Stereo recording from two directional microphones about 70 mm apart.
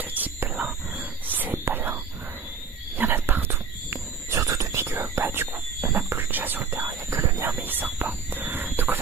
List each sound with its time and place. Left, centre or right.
0.0 s whispering: right
3.0 s wild animals: right
4.4 s whispering: right
6.8 s whispering: right
7.6 s whispering: right
7.9 s a sound: right